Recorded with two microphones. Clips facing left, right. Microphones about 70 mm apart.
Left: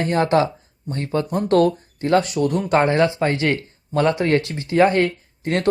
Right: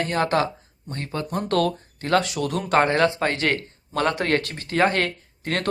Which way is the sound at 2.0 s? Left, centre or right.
Right.